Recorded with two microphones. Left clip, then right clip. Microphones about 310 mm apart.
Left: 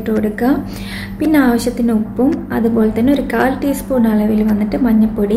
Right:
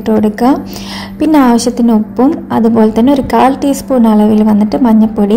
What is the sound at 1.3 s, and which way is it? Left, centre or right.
A woman's voice, centre.